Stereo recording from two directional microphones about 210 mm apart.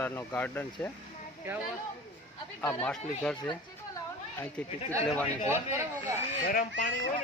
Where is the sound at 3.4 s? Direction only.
20° left (ahead or behind).